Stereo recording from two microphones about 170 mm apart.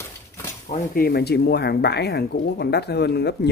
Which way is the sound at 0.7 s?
60° left (ahead or behind).